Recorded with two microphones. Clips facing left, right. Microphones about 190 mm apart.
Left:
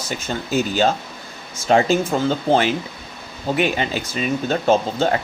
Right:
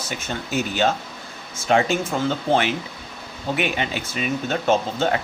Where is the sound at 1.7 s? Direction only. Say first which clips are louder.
Left 3 dB; 35° left (ahead or behind).